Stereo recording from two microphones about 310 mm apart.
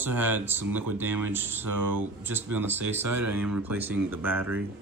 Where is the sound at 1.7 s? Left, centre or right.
Right.